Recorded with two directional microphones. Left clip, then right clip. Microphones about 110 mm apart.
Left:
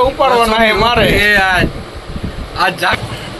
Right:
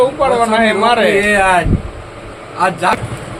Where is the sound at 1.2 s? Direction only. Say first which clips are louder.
Even; 35° right (ahead or behind).